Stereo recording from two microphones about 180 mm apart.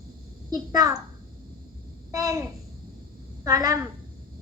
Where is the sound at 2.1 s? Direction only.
20° right (ahead or behind).